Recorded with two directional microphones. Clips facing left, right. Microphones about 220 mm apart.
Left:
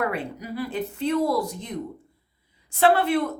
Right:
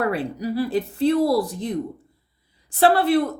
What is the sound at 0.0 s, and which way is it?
A woman's voice, 35° right (ahead or behind).